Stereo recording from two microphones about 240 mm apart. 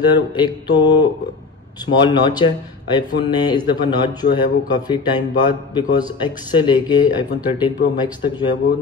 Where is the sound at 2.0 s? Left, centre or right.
Centre.